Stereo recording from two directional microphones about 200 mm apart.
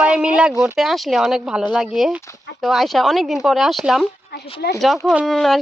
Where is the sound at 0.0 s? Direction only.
5° right (ahead or behind).